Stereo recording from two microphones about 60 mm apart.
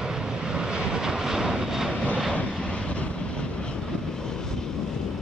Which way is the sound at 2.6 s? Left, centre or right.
Centre.